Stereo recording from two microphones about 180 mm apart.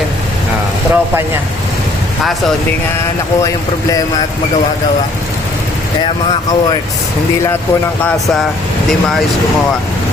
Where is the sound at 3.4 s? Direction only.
20° left (ahead or behind).